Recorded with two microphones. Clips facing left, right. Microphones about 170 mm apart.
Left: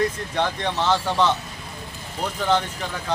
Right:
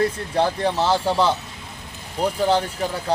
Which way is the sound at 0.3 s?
35° right (ahead or behind).